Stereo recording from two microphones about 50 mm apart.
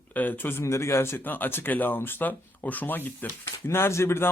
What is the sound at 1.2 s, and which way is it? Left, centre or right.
Speech, left.